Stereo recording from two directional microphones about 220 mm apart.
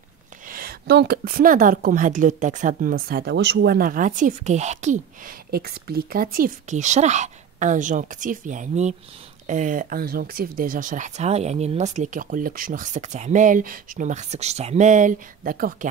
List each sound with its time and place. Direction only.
0.5 s a woman's voice: 40° right (ahead or behind)